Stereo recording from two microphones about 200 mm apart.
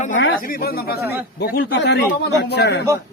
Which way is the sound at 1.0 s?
10° right (ahead or behind).